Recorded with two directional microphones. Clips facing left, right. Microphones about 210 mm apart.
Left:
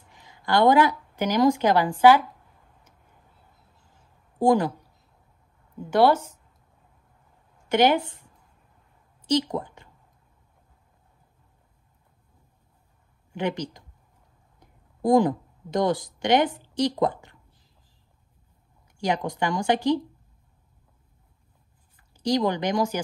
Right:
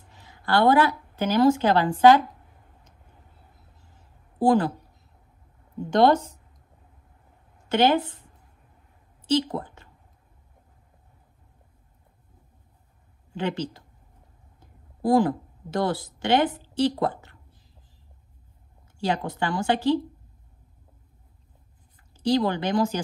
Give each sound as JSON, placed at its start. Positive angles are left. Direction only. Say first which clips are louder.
{"t": 0.1, "sound": "a woman's voice", "louder": "even", "side_deg": 15}
{"t": 4.4, "sound": "speech", "louder": "even", "side_deg": 15}
{"t": 5.9, "sound": "speech", "louder": "even", "side_deg": 10}
{"t": 7.7, "sound": "speech", "louder": "even", "side_deg": 15}
{"t": 8.0, "sound": "speech", "louder": "right 3 dB", "side_deg": -20}
{"t": 9.5, "sound": "a woman's voice", "louder": "left 2 dB", "side_deg": 15}
{"t": 13.3, "sound": "a woman's voice", "louder": "even", "side_deg": 15}
{"t": 18.9, "sound": "speech", "louder": "left 1 dB", "side_deg": 15}
{"t": 22.2, "sound": "speech", "louder": "right 1 dB", "side_deg": 15}